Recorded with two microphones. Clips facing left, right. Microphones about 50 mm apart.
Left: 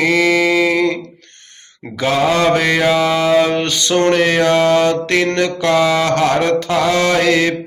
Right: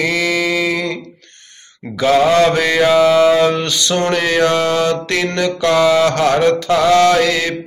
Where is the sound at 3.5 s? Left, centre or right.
Left.